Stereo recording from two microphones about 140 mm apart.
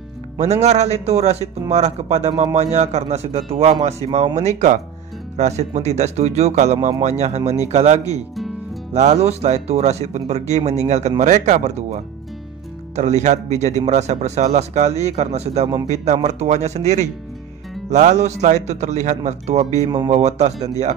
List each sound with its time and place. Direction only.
0.4 s speech: 55° right (ahead or behind)